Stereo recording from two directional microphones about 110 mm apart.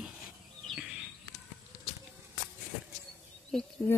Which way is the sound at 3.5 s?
Centre (ahead or behind).